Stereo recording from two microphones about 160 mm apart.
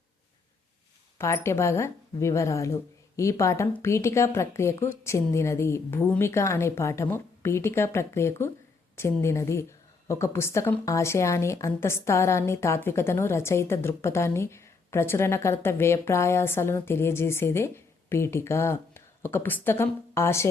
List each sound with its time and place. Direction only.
1.2 s a woman's voice: 15° left (ahead or behind)